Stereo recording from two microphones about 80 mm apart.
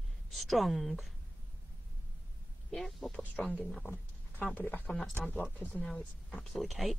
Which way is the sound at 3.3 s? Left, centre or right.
Centre.